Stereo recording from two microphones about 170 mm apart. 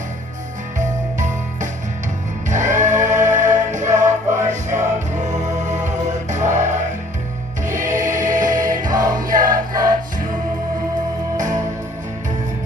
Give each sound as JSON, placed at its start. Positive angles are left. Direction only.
{"t": 0.8, "sound": "jingle bell", "side_deg": -45}
{"t": 2.5, "sound": "music", "side_deg": -45}
{"t": 8.9, "sound": "music", "side_deg": -20}
{"t": 9.4, "sound": "music", "side_deg": -55}
{"t": 11.3, "sound": "music", "side_deg": -45}